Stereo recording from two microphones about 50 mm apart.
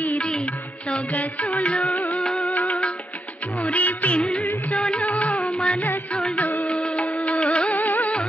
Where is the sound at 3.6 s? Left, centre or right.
Left.